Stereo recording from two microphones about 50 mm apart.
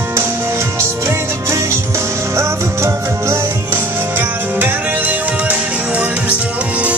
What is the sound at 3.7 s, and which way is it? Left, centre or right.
Music, right.